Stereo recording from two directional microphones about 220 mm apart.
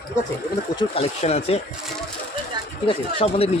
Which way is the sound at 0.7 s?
25° left (ahead or behind).